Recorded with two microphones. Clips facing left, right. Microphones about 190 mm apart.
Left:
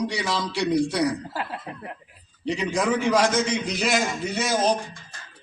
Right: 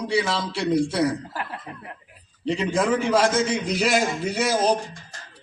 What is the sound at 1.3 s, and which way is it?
Speech, 15° left (ahead or behind).